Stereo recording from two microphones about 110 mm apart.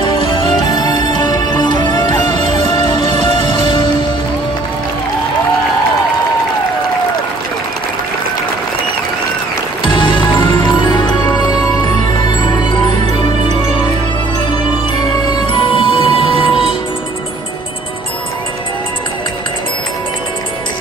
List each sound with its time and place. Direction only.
0.0 s music: 45° left (ahead or behind)
9.9 s music: 45° left (ahead or behind)
15.2 s music: 50° left (ahead or behind)